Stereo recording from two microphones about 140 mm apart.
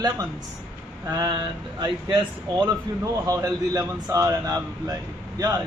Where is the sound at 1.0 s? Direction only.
25° right (ahead or behind).